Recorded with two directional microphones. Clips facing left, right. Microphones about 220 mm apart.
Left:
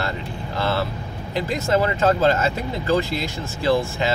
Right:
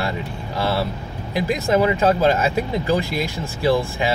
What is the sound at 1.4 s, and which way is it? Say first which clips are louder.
Speech: right 2 dB; 15° right (ahead or behind).